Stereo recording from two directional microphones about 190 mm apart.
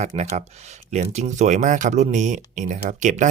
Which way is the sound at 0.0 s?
35° right (ahead or behind).